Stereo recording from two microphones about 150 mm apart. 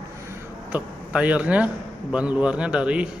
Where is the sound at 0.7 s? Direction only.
10° right (ahead or behind).